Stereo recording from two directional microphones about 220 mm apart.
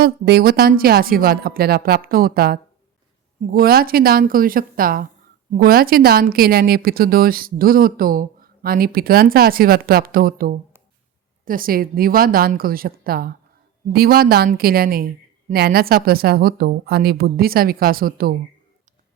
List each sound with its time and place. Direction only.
0.0 s a woman's voice: 45° right (ahead or behind)